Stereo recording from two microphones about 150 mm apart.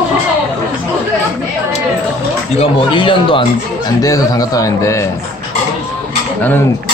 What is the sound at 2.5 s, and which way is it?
Speech, 35° left (ahead or behind).